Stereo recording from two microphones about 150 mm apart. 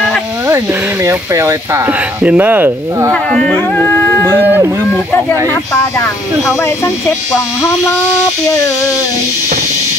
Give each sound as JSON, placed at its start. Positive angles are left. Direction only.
{"t": 1.0, "sound": "speech", "side_deg": -20}
{"t": 3.1, "sound": "speech", "side_deg": 5}
{"t": 4.3, "sound": "speech", "side_deg": -15}
{"t": 5.5, "sound": "speech", "side_deg": 15}